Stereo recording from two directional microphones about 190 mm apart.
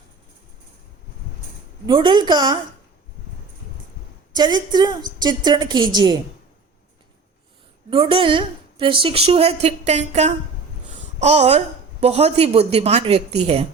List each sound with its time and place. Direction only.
1.9 s a woman's voice: 25° right (ahead or behind)
4.4 s a woman's voice: 25° right (ahead or behind)
7.9 s a woman's voice: 30° right (ahead or behind)